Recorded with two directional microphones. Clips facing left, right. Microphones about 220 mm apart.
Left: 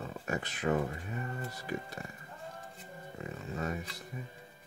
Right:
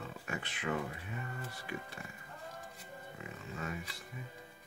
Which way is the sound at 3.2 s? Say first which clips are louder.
Left 7 dB; 40° left (ahead or behind).